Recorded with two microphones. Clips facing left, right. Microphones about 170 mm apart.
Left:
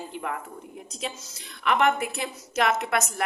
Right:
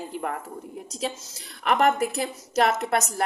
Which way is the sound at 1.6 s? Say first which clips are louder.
Right 2 dB; 40° right (ahead or behind).